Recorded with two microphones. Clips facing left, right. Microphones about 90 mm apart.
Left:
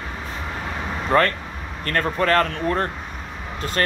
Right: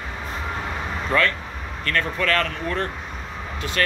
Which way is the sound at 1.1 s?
40° left (ahead or behind).